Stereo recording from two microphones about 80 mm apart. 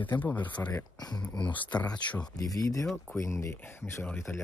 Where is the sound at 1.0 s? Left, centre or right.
Left.